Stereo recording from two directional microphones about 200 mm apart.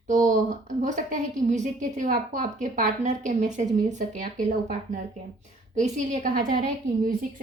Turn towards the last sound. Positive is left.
turn(degrees=-40)  # may be behind; listen again after turning